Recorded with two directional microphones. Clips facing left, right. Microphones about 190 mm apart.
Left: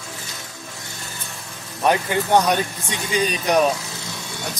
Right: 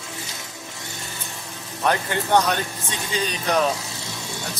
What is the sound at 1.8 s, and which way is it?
Speech, 15° left (ahead or behind).